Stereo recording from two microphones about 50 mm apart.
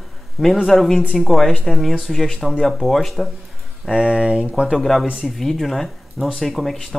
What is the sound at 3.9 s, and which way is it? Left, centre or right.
Speech, centre.